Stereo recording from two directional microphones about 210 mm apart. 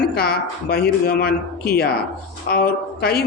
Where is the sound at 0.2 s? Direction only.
50° left (ahead or behind).